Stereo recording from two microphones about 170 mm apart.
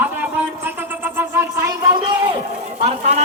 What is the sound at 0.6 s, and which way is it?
Cat, 10° right (ahead or behind).